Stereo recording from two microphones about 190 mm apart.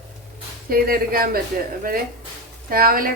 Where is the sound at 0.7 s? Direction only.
50° right (ahead or behind).